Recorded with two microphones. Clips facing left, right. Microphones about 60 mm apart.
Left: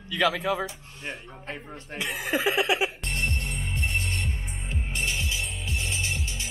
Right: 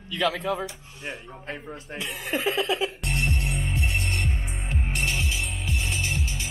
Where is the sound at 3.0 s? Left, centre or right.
Centre.